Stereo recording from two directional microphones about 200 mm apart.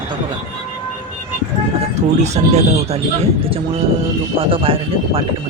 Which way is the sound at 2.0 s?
35° right (ahead or behind).